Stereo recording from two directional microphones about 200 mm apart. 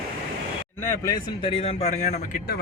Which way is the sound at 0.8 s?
15° left (ahead or behind).